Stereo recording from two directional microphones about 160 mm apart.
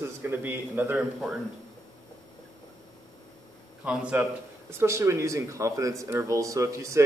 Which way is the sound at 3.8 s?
5° right (ahead or behind).